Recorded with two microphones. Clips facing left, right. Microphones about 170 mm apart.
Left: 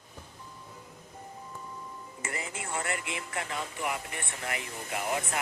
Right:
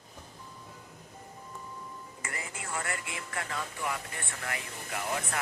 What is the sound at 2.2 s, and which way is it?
Speech, 20° left (ahead or behind).